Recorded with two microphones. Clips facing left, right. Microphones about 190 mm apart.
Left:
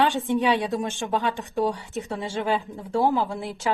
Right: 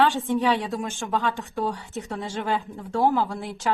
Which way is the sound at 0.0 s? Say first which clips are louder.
Even; 15° left (ahead or behind).